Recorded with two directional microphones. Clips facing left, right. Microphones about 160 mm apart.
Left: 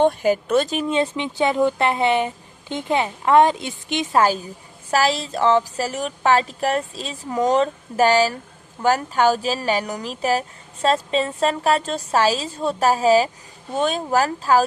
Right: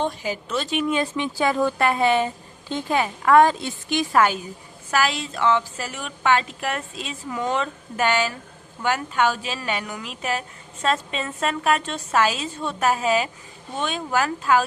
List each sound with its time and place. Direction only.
0.0 s speech: 55° left (ahead or behind)
0.9 s a woman's voice: 25° left (ahead or behind)